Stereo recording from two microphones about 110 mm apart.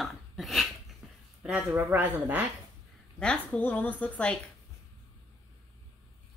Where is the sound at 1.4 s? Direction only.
10° right (ahead or behind).